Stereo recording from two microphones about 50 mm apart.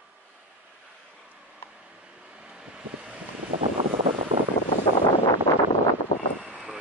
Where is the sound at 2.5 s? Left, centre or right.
Centre.